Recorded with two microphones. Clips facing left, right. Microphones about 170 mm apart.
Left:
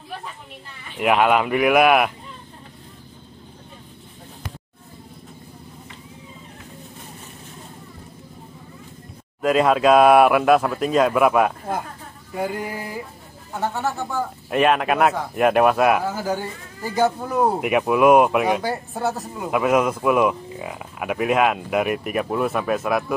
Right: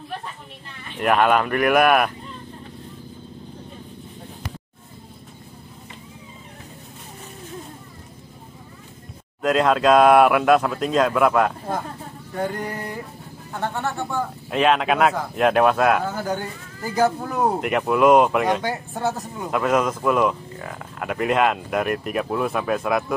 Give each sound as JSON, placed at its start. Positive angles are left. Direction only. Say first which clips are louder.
{"t": 0.9, "sound": "speech", "louder": "even", "side_deg": 10}
{"t": 9.4, "sound": "speech", "louder": "left 1 dB", "side_deg": 5}